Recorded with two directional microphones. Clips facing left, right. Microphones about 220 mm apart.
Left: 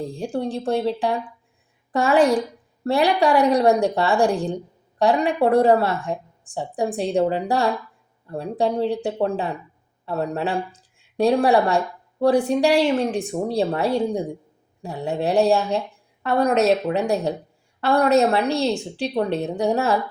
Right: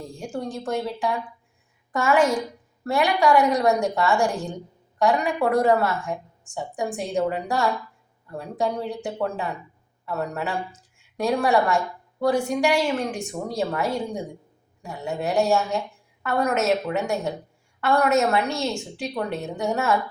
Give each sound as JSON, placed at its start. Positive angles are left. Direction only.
{"t": 0.0, "sound": "a woman's voice", "side_deg": 35}